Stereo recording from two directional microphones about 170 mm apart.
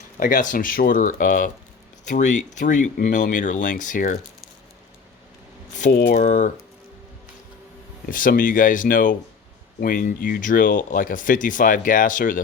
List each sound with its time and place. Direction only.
0.2 s speech: 50° left (ahead or behind)
5.7 s speech: 50° left (ahead or behind)
8.1 s speech: 55° left (ahead or behind)